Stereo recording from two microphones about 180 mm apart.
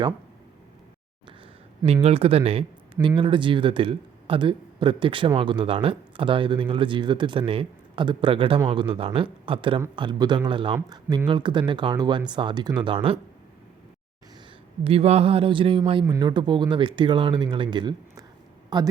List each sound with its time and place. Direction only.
1.8 s a man's voice: 35° right (ahead or behind)
14.8 s a man's voice: 35° right (ahead or behind)